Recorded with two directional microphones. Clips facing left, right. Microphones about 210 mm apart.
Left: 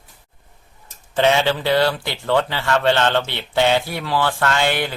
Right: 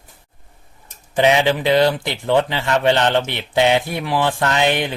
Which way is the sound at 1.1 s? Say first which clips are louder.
Right 2 dB; 15° right (ahead or behind).